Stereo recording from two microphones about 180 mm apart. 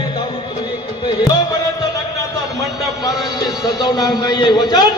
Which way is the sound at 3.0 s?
20° left (ahead or behind).